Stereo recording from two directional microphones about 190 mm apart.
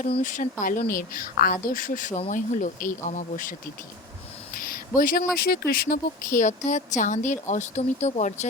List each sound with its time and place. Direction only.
0.1 s speech: 40° left (ahead or behind)
4.6 s speech: 45° left (ahead or behind)